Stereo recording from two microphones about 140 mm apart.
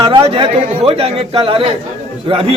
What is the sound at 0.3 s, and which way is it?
A man's voice, 45° right (ahead or behind).